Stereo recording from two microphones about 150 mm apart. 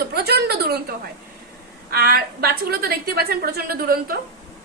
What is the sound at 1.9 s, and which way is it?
A woman's voice, 85° right.